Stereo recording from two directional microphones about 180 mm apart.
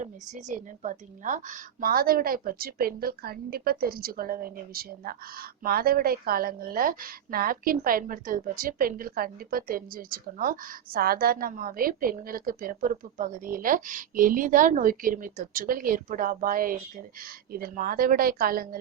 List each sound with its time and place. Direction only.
0.0 s a woman's voice: 45° right (ahead or behind)